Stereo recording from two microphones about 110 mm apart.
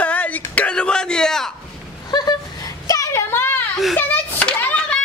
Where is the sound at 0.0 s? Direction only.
15° left (ahead or behind).